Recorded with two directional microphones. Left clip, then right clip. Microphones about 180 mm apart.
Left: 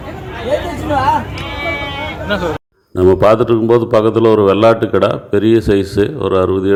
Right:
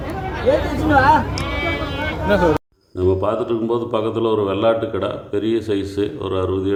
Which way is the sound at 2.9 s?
45° left (ahead or behind).